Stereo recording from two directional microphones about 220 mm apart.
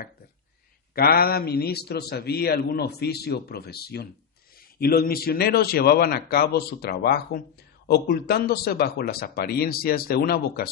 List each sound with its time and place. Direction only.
0.9 s a man's voice: 45° left (ahead or behind)